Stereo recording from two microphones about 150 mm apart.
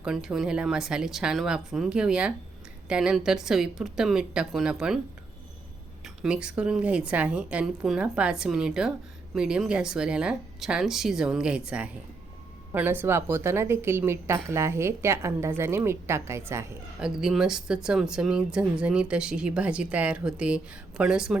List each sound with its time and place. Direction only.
0.0 s speech: 5° right (ahead or behind)
6.0 s speech: 5° right (ahead or behind)
17.0 s speech: 5° right (ahead or behind)